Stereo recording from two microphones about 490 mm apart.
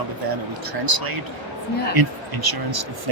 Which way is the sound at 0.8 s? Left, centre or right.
Right.